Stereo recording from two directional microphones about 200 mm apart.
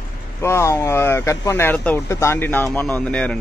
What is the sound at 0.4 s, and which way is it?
Speech, 15° left (ahead or behind).